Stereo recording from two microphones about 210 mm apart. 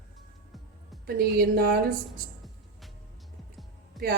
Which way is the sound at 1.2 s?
45° right (ahead or behind).